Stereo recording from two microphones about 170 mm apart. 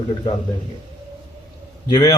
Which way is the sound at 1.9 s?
25° left (ahead or behind).